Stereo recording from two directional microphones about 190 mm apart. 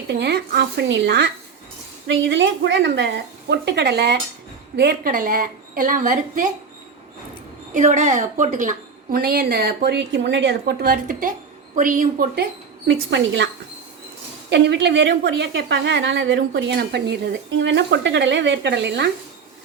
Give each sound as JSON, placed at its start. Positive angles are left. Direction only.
{"t": 0.1, "sound": "a woman's voice", "side_deg": -60}
{"t": 7.7, "sound": "a woman's voice", "side_deg": -40}
{"t": 12.9, "sound": "a woman's voice", "side_deg": -65}
{"t": 14.5, "sound": "a woman's voice", "side_deg": -65}